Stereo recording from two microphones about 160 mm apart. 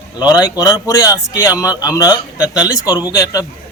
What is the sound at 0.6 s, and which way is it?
A man's voice, 25° left (ahead or behind).